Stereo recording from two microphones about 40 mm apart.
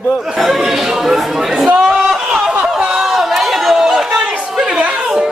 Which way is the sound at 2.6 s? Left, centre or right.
Centre.